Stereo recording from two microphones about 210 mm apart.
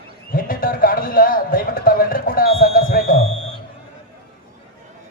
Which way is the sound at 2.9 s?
45° left (ahead or behind).